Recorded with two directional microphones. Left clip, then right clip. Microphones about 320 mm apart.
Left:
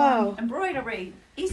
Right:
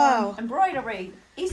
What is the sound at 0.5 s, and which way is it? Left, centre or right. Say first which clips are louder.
Speech: right 8 dB; right.